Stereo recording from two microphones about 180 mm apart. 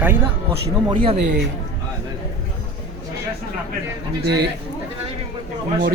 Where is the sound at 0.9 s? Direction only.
30° right (ahead or behind).